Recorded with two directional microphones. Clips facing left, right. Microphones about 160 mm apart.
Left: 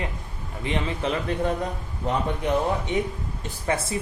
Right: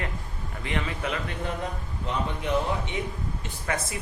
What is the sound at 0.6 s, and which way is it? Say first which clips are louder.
Speech: left 4 dB; 25° left (ahead or behind).